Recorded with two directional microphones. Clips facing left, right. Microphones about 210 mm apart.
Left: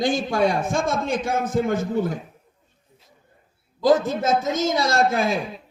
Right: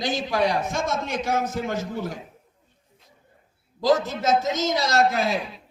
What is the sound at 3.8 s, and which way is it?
A man's voice, 55° left (ahead or behind).